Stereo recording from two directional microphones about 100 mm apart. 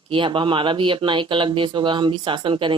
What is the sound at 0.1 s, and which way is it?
Speech, 55° right (ahead or behind).